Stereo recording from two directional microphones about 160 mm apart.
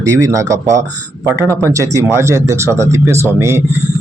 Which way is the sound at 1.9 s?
15° right (ahead or behind).